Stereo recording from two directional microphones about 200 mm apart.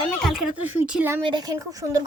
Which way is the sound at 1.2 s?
20° right (ahead or behind).